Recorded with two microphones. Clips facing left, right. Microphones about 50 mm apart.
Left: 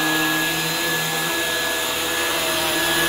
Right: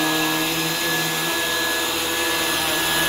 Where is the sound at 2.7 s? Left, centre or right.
Centre.